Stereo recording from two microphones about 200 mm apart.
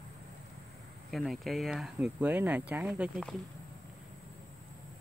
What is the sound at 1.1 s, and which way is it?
Speech, centre (ahead or behind).